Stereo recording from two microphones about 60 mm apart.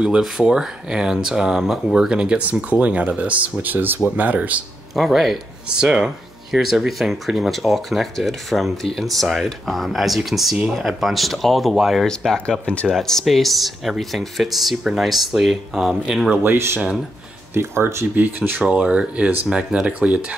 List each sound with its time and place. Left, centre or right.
0.4 s speech: centre; by 4.6 s right
4.9 s speech: centre
12.3 s speech: centre
12.9 s speech: centre
16.5 s speech: right
18.1 s speech: right